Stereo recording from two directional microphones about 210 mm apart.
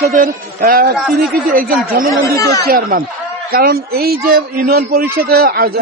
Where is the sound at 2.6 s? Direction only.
45° right (ahead or behind).